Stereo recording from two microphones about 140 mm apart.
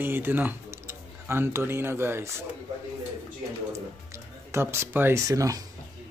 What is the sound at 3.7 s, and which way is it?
Speech, 20° right (ahead or behind).